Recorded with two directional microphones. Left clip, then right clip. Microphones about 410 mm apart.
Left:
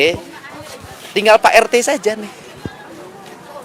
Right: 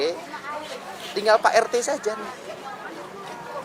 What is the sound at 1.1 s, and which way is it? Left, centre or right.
Speech, left.